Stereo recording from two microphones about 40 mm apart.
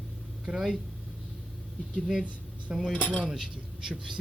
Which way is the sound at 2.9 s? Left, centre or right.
Right.